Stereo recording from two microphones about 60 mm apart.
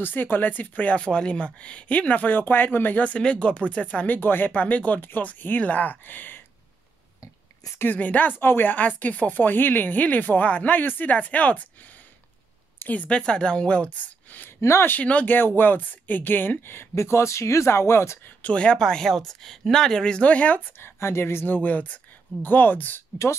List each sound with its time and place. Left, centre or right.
0.0 s speech: left
7.8 s speech: left
12.7 s speech: left
14.0 s a sound: left
14.6 s speech: left
14.9 s speech: left
18.4 s speech: centre
18.8 s speech: centre; by 20.6 s left
20.8 s speech: left
21.5 s speech: left